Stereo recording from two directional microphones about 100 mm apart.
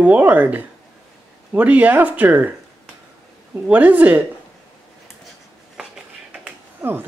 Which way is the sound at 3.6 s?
15° right (ahead or behind).